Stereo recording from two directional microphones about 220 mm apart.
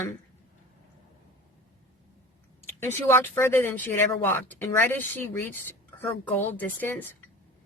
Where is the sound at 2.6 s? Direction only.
10° left (ahead or behind).